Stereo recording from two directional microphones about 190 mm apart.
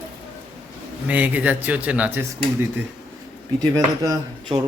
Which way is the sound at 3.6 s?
20° right (ahead or behind).